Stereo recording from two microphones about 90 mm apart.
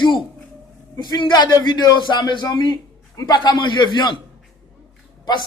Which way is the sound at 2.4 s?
45° left (ahead or behind).